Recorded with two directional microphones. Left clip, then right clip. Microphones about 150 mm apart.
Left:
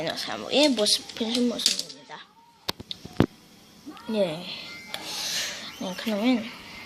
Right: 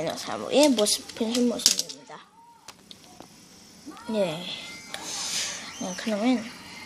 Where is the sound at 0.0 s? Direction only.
5° right (ahead or behind).